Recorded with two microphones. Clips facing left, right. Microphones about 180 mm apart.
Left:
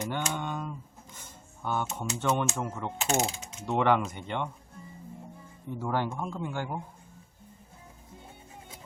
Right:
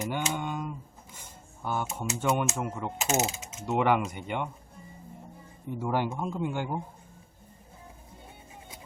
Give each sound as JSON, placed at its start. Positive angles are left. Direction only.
{"t": 0.0, "sound": "mechanisms", "side_deg": -10}
{"t": 5.8, "sound": "mechanisms", "side_deg": -10}